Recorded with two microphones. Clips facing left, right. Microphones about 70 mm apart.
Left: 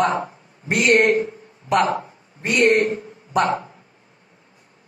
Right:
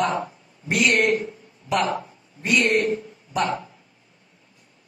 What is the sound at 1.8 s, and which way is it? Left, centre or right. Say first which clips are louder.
A man's voice: left 3 dB; left.